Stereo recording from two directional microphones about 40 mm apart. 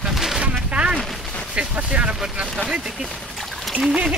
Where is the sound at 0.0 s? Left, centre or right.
Centre.